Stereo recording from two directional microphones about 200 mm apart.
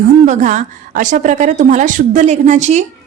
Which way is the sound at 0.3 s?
40° right (ahead or behind).